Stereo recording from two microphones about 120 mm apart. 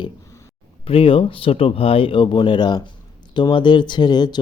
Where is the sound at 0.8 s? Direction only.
50° left (ahead or behind).